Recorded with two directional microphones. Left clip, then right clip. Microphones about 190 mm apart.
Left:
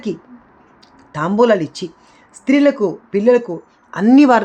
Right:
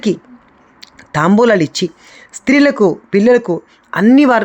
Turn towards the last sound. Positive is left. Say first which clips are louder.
# right 1 dB
turn(degrees=-15)  # may be behind; listen again after turning